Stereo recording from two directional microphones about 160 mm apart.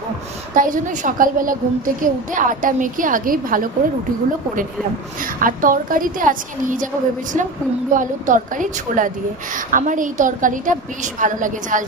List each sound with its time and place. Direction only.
0.6 s a woman's voice: 55° right (ahead or behind)
5.4 s a woman's voice: 60° right (ahead or behind)
7.9 s a woman's voice: 55° right (ahead or behind)